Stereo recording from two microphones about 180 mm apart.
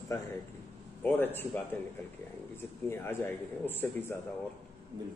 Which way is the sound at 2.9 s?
10° left (ahead or behind).